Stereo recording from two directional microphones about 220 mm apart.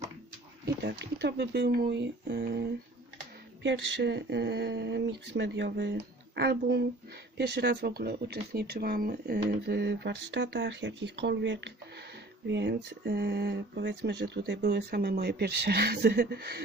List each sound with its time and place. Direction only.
0.6 s speech: 50° right (ahead or behind)